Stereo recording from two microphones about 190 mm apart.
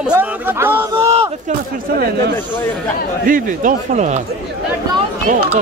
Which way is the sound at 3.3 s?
45° right (ahead or behind).